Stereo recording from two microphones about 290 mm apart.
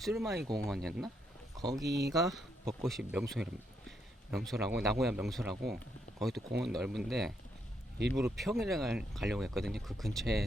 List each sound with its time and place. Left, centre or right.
0.0 s speech: centre
1.9 s speech: right
2.1 s speech: centre